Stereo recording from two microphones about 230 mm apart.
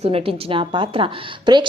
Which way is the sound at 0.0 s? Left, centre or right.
Right.